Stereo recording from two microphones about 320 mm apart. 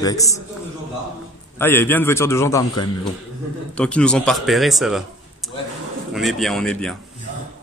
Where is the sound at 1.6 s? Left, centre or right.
Centre.